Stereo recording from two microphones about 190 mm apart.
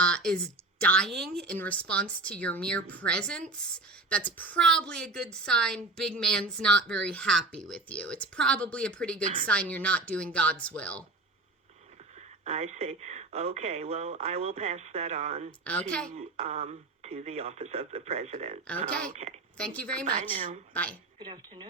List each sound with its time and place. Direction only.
0.0 s speech: 5° left (ahead or behind)
9.2 s speech: 40° right (ahead or behind)
9.5 s a woman's voice: 5° left (ahead or behind)
12.5 s speech: 35° right (ahead or behind)
15.6 s a woman's voice: 5° left (ahead or behind)
16.0 s speech: 35° right (ahead or behind)
19.5 s speech: 5° left (ahead or behind)
20.2 s a woman's voice: 45° right (ahead or behind)
20.7 s a woman's voice: 10° left (ahead or behind)
21.2 s speech: 25° right (ahead or behind)